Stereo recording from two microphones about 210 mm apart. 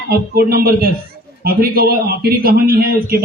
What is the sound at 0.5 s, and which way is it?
A man's voice, 45° right (ahead or behind).